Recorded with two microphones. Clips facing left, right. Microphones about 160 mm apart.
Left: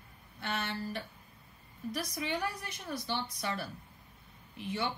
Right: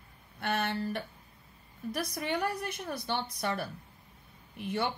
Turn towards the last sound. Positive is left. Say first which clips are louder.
# right 3 dB
turn(degrees=-55)  # may be behind; listen again after turning